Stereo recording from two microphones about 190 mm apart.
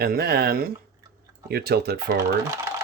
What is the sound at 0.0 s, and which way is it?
Speech, 55° right (ahead or behind).